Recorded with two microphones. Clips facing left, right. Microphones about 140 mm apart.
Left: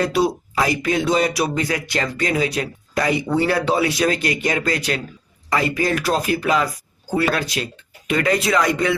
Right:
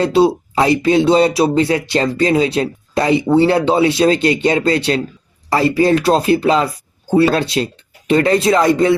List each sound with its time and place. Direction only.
0.0 s speech: 30° right (ahead or behind)